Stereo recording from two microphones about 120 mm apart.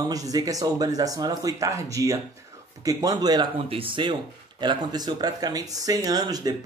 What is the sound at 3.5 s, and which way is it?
Speech, 50° right (ahead or behind).